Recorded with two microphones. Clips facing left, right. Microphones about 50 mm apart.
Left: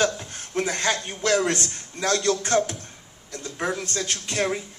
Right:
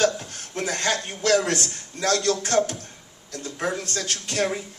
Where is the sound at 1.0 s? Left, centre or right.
Left.